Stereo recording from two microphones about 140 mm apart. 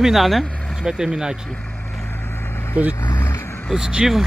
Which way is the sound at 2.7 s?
10° right (ahead or behind).